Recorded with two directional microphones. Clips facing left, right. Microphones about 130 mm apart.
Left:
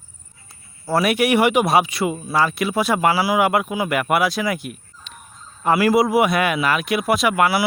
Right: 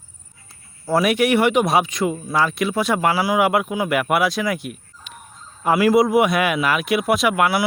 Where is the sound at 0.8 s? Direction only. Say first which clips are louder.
Right 1 dB; 5° left (ahead or behind).